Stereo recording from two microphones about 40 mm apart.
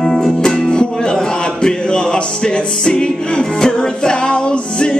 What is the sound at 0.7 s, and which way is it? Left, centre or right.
Music, left.